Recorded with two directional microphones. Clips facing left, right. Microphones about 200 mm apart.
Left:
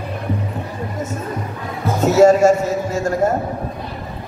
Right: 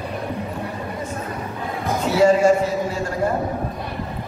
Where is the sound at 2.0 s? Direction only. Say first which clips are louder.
Left 4 dB; 45° left (ahead or behind).